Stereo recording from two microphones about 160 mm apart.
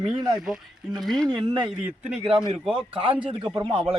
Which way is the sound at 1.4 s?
30° right (ahead or behind).